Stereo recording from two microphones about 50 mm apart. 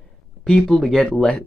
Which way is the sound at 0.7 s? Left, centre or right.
Centre.